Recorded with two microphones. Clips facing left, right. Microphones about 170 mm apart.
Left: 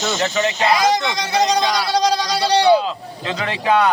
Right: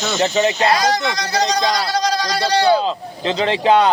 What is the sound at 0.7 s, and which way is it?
Speech, 20° left (ahead or behind).